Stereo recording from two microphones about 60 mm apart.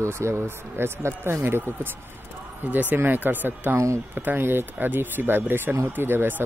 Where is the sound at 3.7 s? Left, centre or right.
Right.